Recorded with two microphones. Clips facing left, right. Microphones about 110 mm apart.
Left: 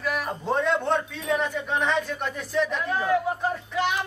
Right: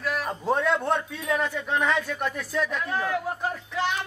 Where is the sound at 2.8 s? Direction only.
10° left (ahead or behind).